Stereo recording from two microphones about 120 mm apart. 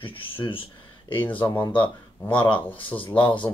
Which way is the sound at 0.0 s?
45° left (ahead or behind).